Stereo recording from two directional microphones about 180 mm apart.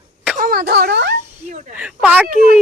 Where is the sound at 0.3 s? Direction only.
55° right (ahead or behind).